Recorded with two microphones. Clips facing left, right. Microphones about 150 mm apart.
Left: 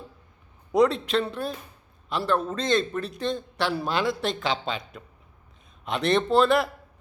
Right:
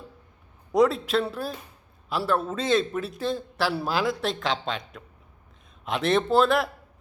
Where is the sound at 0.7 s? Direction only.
Centre (ahead or behind).